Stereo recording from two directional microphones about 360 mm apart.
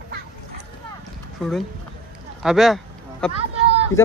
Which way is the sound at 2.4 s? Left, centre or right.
Centre.